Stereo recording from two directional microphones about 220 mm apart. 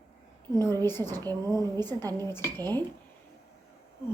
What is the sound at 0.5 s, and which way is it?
Speech, 10° left (ahead or behind).